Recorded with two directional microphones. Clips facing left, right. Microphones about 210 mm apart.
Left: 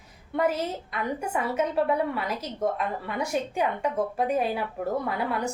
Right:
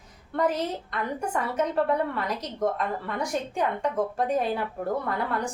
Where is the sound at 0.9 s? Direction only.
10° left (ahead or behind).